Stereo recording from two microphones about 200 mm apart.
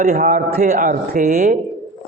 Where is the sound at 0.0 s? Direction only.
40° right (ahead or behind).